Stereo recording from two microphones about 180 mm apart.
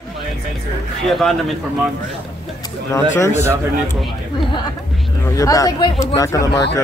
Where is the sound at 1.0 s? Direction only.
Centre (ahead or behind).